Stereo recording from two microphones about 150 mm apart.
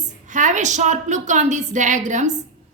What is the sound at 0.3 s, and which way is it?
A woman's voice, 55° right (ahead or behind).